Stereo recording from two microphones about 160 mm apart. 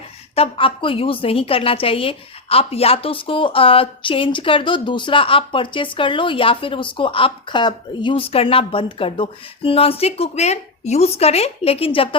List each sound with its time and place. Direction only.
0.3 s a woman's voice: 35° left (ahead or behind)